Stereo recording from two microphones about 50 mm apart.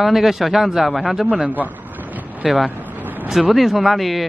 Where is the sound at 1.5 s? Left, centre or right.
Right.